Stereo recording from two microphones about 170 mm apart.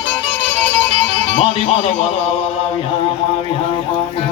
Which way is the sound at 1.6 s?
35° left (ahead or behind).